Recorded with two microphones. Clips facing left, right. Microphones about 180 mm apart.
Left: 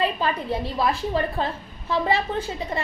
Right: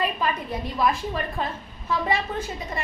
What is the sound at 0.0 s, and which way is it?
A woman's voice, 30° left (ahead or behind).